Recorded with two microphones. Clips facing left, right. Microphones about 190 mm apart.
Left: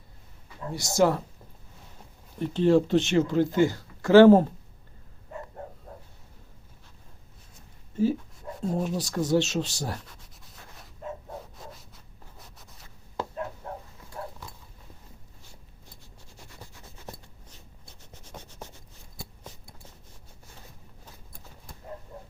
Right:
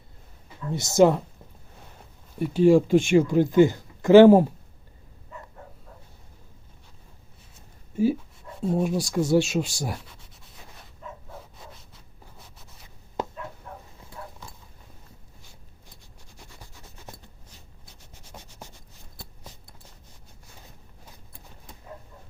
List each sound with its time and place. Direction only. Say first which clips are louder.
0.7 s speech: right 5 dB; 20° right (ahead or behind)
2.4 s speech: right 4 dB; 10° right (ahead or behind)
7.9 s speech: right 2 dB; 10° right (ahead or behind)
12.4 s zipper: even; centre (ahead or behind)
13.2 s a sound: right 3 dB; 20° right (ahead or behind)
18.3 s a sound: left 1 dB; 5° right (ahead or behind)